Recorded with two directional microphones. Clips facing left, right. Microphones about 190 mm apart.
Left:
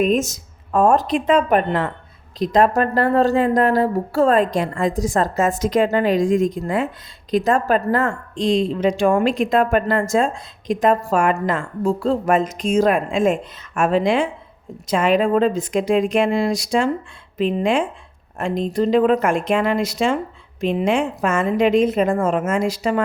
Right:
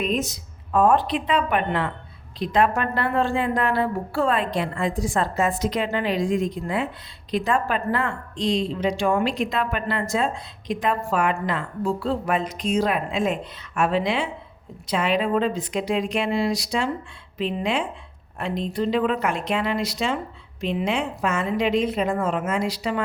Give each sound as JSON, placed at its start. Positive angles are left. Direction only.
{"t": 0.0, "sound": "a woman's voice", "side_deg": 45}